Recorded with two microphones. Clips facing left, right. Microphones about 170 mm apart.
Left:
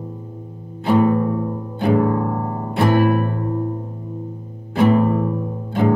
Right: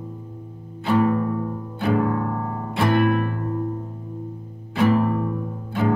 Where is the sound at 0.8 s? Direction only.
20° left (ahead or behind).